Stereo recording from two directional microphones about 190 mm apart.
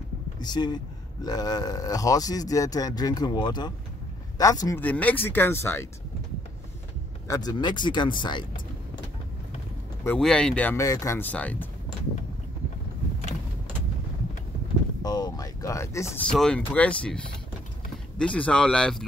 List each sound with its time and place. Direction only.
0.4 s speech: 20° left (ahead or behind)
7.2 s speech: 20° left (ahead or behind)
10.0 s speech: 5° left (ahead or behind)
15.0 s a sound: 20° left (ahead or behind)
16.3 s speech: 5° left (ahead or behind)